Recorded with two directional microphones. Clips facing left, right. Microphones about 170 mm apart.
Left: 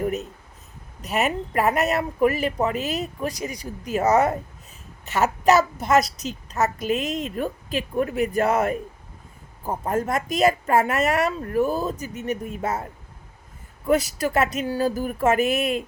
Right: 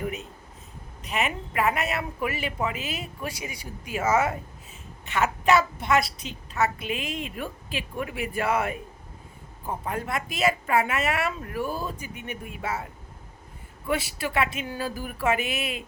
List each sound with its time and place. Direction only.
1.0 s a woman's voice: 40° left (ahead or behind)